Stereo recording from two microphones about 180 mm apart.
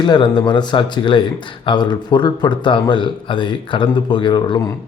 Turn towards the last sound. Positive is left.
turn(degrees=25)  # may be behind; listen again after turning